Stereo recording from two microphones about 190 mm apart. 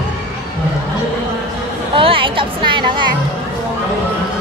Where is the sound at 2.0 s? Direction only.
30° right (ahead or behind).